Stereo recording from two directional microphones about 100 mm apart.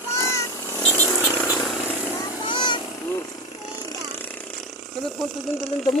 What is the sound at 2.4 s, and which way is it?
Children playing, 55° left (ahead or behind).